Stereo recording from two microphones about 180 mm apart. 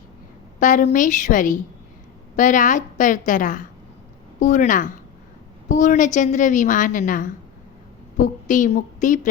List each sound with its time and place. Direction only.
0.6 s a woman's voice: 45° left (ahead or behind)